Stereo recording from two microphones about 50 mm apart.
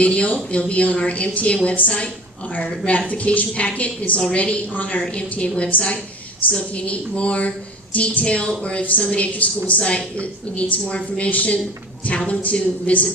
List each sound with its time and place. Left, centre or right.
0.0 s a woman's voice: left